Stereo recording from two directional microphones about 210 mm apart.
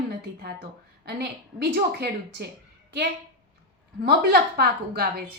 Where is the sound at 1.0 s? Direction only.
50° right (ahead or behind).